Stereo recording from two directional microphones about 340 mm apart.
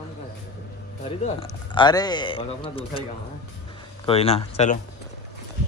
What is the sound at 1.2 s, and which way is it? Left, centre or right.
Speech, centre.